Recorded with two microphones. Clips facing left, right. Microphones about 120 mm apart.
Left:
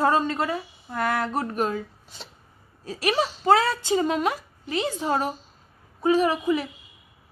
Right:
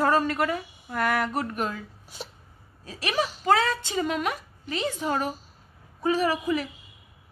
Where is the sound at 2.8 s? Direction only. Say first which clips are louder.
Left 4 dB; 35° left (ahead or behind).